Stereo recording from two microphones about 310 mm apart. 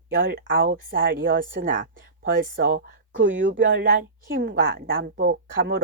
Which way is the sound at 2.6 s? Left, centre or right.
Right.